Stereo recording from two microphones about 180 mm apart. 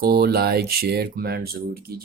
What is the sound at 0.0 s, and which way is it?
Speech, 60° right (ahead or behind).